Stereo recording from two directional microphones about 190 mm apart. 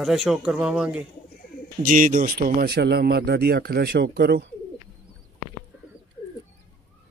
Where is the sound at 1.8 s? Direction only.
45° right (ahead or behind); by 4.4 s 60° right (ahead or behind).